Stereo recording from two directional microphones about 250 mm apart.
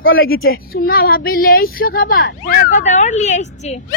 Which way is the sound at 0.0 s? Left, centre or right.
Left.